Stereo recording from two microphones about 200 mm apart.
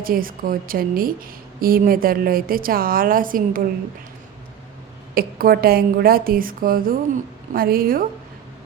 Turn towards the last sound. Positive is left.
turn(degrees=-45)  # may be behind; listen again after turning